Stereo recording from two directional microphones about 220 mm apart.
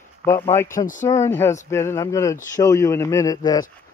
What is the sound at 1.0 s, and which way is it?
Speech, 15° left (ahead or behind).